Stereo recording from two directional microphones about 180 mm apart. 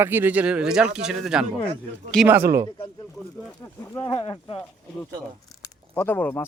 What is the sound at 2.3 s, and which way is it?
Speech, 15° right (ahead or behind).